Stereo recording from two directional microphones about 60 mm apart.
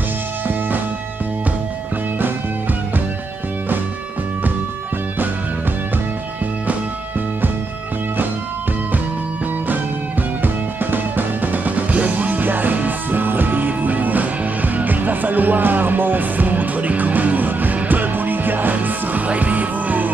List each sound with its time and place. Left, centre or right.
0.5 s music: right
10.4 s music: right